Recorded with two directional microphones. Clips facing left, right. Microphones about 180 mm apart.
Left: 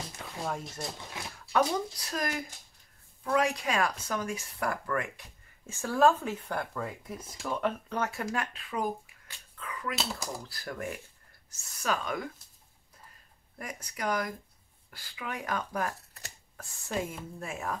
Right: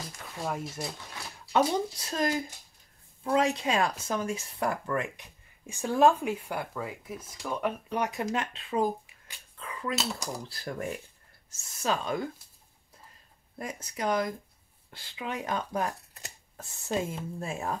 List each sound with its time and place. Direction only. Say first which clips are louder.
0.4 s speech: right 2 dB; 5° right (ahead or behind)
1.5 s speech: right 2 dB; 25° right (ahead or behind); by 7.7 s 5° right (ahead or behind)
7.9 s speech: right 2 dB; 15° right (ahead or behind)
9.6 s dog: right 2 dB; 30° right (ahead or behind)
10.5 s speech: right 2 dB; 25° right (ahead or behind)
13.6 s speech: right 3 dB; 25° right (ahead or behind)